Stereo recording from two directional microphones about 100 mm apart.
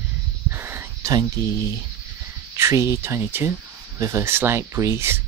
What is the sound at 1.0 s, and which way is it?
Speech, 35° right (ahead or behind).